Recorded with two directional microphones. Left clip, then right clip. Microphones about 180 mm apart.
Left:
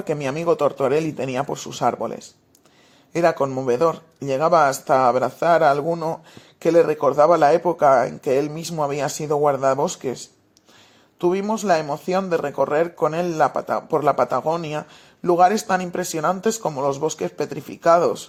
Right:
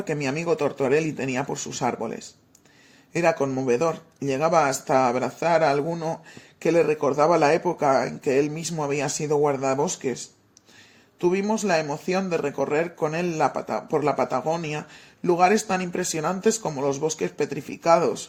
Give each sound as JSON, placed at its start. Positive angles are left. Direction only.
{"t": 0.1, "sound": "speech", "side_deg": 35}
{"t": 11.2, "sound": "speech", "side_deg": 30}